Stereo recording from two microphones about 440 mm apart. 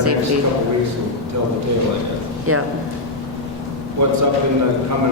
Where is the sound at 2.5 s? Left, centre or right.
Right.